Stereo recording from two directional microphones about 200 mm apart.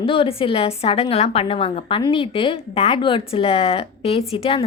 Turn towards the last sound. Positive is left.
turn(degrees=30)  # may be behind; listen again after turning